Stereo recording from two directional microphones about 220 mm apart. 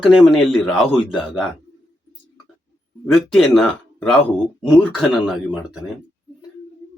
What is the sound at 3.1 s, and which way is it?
Speech, centre (ahead or behind).